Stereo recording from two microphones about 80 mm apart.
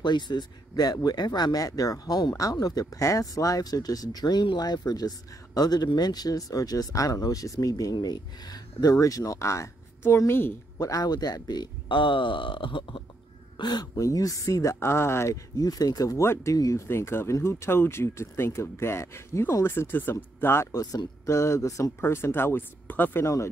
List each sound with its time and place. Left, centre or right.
0.0 s speech: left
10.8 s speech: left
13.6 s speech: left
13.9 s speech: left
15.5 s speech: left
16.2 s speech: left
16.5 s speech: left
16.8 s speech: left
20.7 s speech: left
22.0 s speech: left
23.2 s speech: left